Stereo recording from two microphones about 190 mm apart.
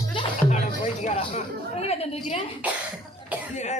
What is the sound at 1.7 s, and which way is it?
Speech, 30° left (ahead or behind).